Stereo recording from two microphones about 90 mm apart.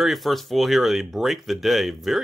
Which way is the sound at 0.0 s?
Centre (ahead or behind).